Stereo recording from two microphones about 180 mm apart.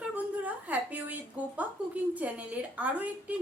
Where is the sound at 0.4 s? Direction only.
10° right (ahead or behind).